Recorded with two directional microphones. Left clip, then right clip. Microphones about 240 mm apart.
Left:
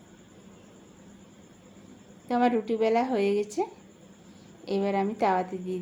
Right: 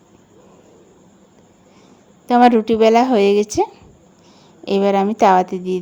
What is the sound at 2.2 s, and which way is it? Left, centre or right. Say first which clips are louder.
A woman's voice: right 13 dB; right.